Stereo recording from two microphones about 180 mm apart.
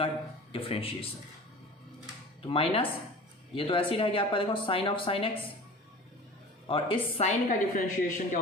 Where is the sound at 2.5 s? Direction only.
30° left (ahead or behind).